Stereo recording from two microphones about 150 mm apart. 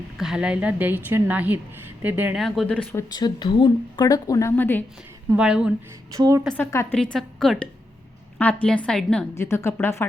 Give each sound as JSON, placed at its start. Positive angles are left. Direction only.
{"t": 0.2, "sound": "a woman's voice", "side_deg": -5}
{"t": 2.4, "sound": "a woman's voice", "side_deg": 5}
{"t": 2.9, "sound": "speech", "side_deg": 25}
{"t": 5.3, "sound": "a woman's voice", "side_deg": -5}
{"t": 6.1, "sound": "a woman's voice", "side_deg": -20}
{"t": 6.6, "sound": "speech", "side_deg": 20}
{"t": 6.9, "sound": "a woman's voice", "side_deg": 5}
{"t": 9.3, "sound": "a woman's voice", "side_deg": 20}